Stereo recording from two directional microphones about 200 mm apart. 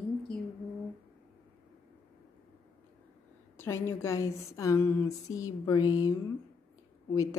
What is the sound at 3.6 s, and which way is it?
A woman's voice, 15° left (ahead or behind).